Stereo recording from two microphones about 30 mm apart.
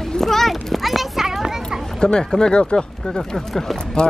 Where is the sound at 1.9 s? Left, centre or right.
Left.